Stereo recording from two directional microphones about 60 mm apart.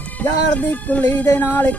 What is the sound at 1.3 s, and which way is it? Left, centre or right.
Music, left.